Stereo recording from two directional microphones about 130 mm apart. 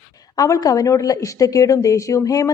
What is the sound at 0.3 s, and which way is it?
A woman's voice, 25° left (ahead or behind).